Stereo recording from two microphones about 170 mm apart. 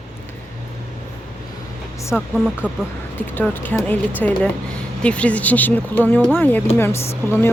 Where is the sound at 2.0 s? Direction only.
15° left (ahead or behind).